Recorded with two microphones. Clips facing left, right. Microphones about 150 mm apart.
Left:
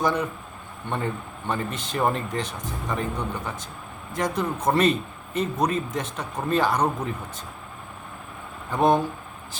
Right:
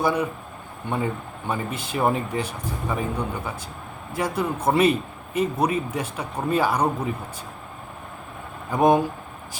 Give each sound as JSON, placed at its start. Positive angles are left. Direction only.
{"t": 0.0, "sound": "a man's voice", "side_deg": -10}
{"t": 8.7, "sound": "a man's voice", "side_deg": -10}